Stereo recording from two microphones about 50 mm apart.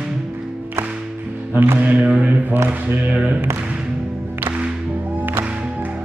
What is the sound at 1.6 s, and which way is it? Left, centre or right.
Music, right.